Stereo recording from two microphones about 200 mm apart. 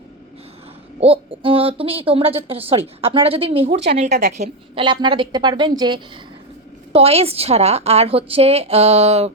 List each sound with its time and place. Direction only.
0.9 s speech: 30° right (ahead or behind)
4.1 s a woman's voice: 40° right (ahead or behind)